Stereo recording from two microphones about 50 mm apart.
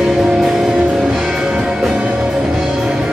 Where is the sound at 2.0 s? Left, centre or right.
Right.